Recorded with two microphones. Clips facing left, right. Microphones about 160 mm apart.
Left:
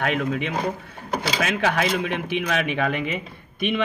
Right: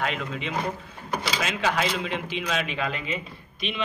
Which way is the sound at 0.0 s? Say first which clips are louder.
Left 6 dB; 65° left (ahead or behind).